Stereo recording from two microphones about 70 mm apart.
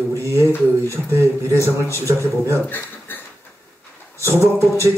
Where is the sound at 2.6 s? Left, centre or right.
Left.